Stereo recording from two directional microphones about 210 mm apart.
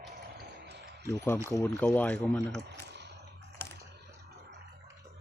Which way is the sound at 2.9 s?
55° right (ahead or behind).